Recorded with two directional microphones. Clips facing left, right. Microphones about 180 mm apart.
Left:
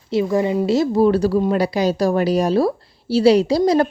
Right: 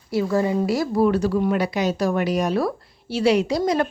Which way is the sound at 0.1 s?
20° left (ahead or behind).